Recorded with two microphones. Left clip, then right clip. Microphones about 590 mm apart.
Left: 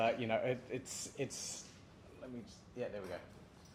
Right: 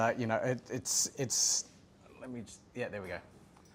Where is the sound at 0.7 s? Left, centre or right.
Right.